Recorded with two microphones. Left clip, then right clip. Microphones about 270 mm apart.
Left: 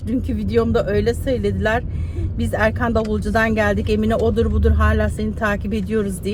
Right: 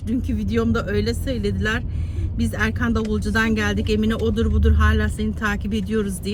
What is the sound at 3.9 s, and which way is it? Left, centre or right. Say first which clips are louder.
Speech: left 4 dB; left.